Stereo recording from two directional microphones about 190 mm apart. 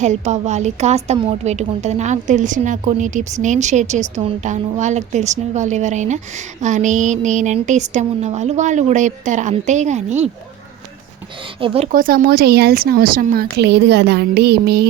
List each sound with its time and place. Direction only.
0.0 s a woman's voice: 40° right (ahead or behind)
11.6 s speech: 30° right (ahead or behind)
11.9 s speech: 50° right (ahead or behind)